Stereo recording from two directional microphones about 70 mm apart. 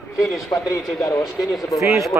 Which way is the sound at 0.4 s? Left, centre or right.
Left.